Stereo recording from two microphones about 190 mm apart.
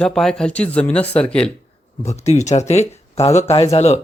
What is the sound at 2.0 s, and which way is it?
Speech, 35° left (ahead or behind).